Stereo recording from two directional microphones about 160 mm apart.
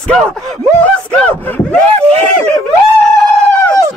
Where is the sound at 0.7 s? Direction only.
10° left (ahead or behind).